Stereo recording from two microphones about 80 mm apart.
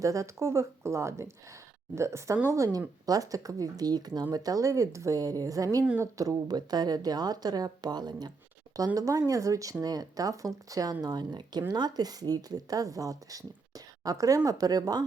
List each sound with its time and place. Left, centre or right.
0.0 s speech: right
9.0 s speech: right
11.0 s speech: right